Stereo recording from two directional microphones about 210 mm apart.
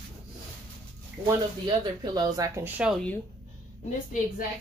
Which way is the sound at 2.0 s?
15° right (ahead or behind).